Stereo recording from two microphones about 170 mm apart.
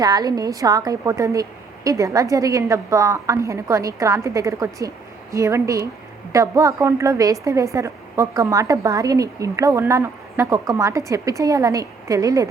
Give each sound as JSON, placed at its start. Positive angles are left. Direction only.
{"t": 0.0, "sound": "a woman's voice", "side_deg": -20}